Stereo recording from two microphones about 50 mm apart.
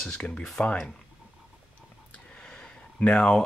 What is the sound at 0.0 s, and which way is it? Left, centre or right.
Speech, centre.